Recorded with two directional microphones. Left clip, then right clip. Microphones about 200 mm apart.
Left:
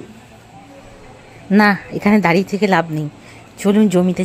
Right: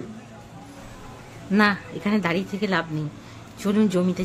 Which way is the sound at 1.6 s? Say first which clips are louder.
Left 6 dB; 30° left (ahead or behind).